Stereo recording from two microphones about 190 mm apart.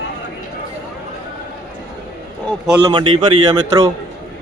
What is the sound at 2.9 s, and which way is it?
Speech, 25° right (ahead or behind).